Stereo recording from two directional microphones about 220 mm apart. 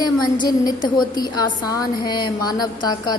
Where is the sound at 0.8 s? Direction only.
20° left (ahead or behind).